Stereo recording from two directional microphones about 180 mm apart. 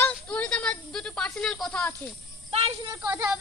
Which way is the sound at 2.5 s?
35° right (ahead or behind).